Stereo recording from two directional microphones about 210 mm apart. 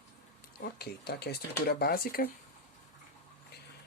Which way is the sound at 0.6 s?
50° left (ahead or behind).